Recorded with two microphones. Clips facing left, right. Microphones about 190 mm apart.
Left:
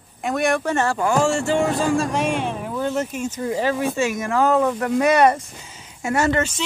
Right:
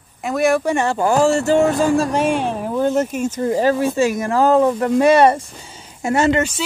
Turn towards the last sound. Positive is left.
turn(degrees=-10)  # may be behind; listen again after turning